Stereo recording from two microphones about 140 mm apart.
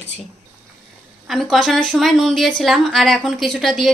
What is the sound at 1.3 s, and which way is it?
A woman's voice, centre (ahead or behind).